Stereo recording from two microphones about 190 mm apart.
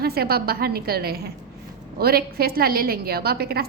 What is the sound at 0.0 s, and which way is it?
A woman's voice, 55° right (ahead or behind).